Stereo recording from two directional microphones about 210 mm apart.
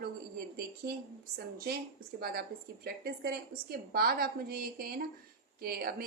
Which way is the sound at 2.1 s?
50° right (ahead or behind).